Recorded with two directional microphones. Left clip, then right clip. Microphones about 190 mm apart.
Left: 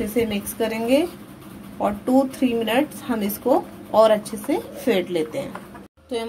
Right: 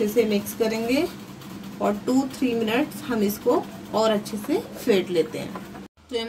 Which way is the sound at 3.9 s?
30° left (ahead or behind).